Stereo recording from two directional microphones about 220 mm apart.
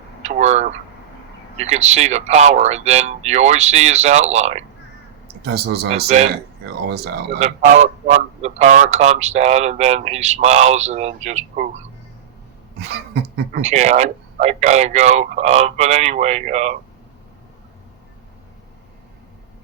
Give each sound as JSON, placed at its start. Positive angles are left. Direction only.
{"t": 0.3, "sound": "speech", "side_deg": -30}
{"t": 5.4, "sound": "speech", "side_deg": -50}
{"t": 6.1, "sound": "speech", "side_deg": -30}
{"t": 6.8, "sound": "speech", "side_deg": -45}
{"t": 7.3, "sound": "speech", "side_deg": -30}
{"t": 13.5, "sound": "speech", "side_deg": -30}